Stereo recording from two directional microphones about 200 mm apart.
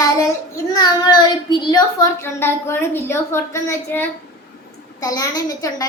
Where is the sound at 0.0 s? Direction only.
15° left (ahead or behind).